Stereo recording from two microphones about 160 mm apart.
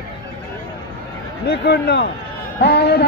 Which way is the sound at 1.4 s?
90° left.